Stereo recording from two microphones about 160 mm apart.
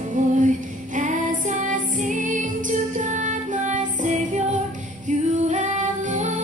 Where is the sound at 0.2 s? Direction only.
55° right (ahead or behind).